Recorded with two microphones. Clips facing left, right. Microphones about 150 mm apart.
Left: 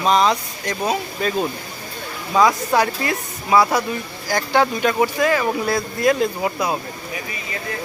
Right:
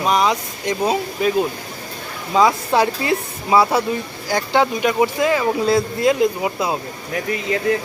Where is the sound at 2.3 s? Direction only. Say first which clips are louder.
Right 1 dB; 25° right (ahead or behind).